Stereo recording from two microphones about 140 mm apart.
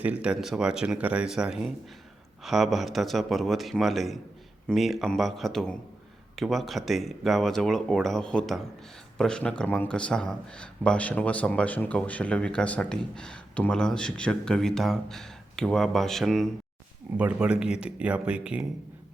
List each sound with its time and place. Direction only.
0.0 s speech: 10° right (ahead or behind)
17.2 s speech: 10° right (ahead or behind)